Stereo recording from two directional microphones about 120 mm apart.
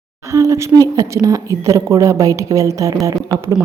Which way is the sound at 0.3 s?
25° right (ahead or behind).